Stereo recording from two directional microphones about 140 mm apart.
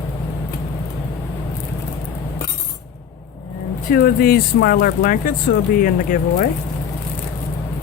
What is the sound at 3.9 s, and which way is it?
Speech, 90° left.